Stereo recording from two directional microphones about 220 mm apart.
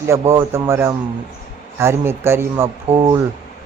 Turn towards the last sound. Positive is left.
turn(degrees=-25)  # may be behind; listen again after turning